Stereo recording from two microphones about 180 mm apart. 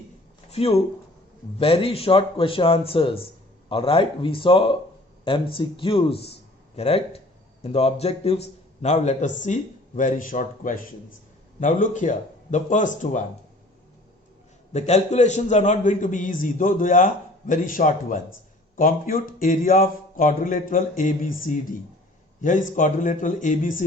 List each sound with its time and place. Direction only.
0.5 s a man's voice: 35° left (ahead or behind)
14.7 s a man's voice: 40° left (ahead or behind)